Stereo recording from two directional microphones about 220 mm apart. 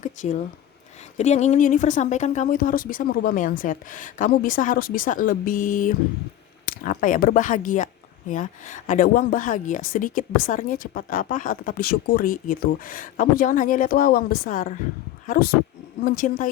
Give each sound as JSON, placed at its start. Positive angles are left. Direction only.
{"t": 0.0, "sound": "a woman's voice", "side_deg": 35}